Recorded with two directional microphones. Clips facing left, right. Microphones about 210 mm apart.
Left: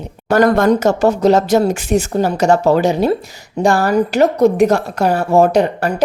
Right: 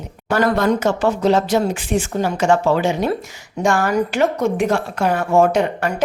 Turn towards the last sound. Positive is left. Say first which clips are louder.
# left 3 dB
turn(degrees=35)  # may be behind; listen again after turning